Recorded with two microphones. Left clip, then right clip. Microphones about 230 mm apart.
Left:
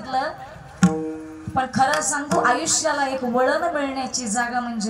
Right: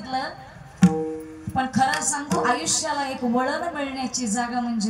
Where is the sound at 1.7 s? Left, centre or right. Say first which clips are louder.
Left 3 dB; centre.